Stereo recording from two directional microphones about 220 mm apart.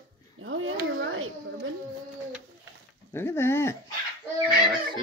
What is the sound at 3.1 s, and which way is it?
Speech, 10° left (ahead or behind).